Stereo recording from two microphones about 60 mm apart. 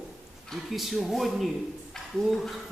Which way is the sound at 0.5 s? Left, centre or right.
Centre.